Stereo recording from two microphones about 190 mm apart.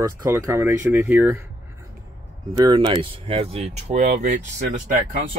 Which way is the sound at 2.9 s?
30° right (ahead or behind).